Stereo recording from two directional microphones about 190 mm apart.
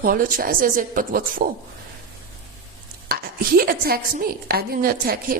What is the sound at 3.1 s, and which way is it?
Speech, 55° right (ahead or behind).